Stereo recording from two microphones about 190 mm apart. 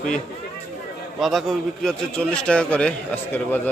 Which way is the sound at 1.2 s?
Centre (ahead or behind).